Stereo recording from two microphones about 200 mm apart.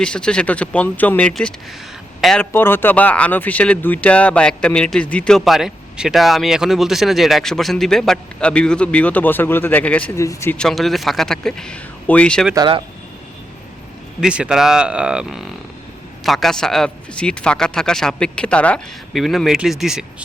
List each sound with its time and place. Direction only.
0.0 s speech: 5° left (ahead or behind)
12.5 s speech: 25° right (ahead or behind)
14.2 s speech: 5° right (ahead or behind)